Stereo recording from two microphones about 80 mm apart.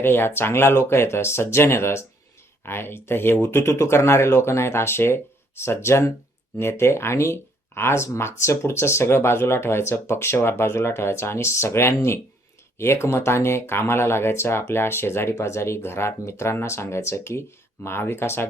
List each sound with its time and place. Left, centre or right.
0.0 s speech: left